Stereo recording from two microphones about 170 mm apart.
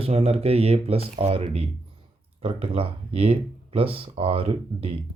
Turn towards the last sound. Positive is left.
turn(degrees=-35)  # may be behind; listen again after turning